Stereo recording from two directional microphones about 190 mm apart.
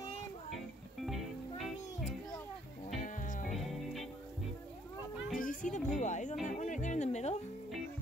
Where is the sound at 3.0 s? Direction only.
45° left (ahead or behind).